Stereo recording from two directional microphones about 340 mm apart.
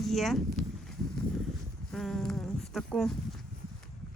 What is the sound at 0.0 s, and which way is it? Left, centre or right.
Speech, centre.